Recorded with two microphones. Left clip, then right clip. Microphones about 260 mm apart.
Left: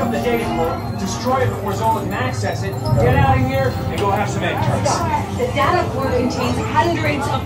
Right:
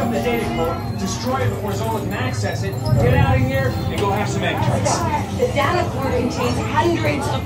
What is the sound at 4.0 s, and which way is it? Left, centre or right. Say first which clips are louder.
Speech: left 2 dB; centre.